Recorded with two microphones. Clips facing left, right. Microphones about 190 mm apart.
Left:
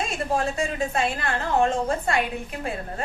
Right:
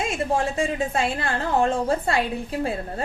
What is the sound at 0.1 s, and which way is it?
A woman's voice, 30° right (ahead or behind).